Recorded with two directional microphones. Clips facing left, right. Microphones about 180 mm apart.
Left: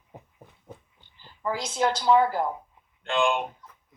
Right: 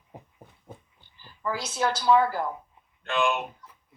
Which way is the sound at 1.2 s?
20° left (ahead or behind).